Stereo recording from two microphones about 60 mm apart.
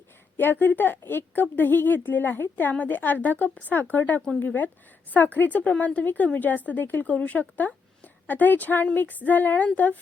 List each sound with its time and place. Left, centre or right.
0.3 s a woman's voice: left